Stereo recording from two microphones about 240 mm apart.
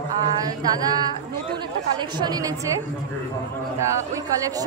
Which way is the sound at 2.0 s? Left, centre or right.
Centre.